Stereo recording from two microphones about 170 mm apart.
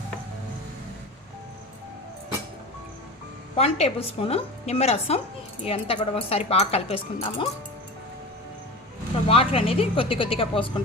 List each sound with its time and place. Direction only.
3.5 s speech: 35° left (ahead or behind)
9.2 s speech: 35° left (ahead or behind)